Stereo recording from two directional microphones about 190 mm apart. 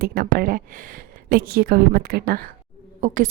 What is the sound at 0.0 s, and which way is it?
A woman's voice, 50° right (ahead or behind).